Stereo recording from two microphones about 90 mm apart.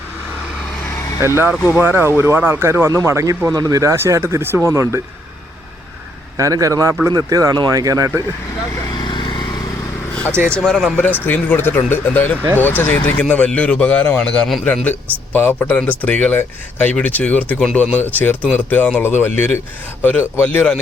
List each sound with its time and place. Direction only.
1.2 s speech: 25° right (ahead or behind)
1.5 s speech: 25° left (ahead or behind)
1.8 s speech: 25° right (ahead or behind)
6.3 s speech: 40° right (ahead or behind)
9.0 s vehicle: 60° left (ahead or behind)
10.6 s speech: centre (ahead or behind)
11.3 s speech: 20° left (ahead or behind)